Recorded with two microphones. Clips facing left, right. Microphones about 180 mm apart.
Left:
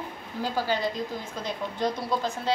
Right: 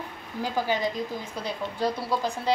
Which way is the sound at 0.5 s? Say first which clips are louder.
Right 1 dB; 15° right (ahead or behind).